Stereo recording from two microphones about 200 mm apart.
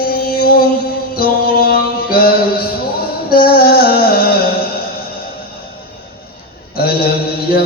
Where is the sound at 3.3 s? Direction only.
50° left (ahead or behind).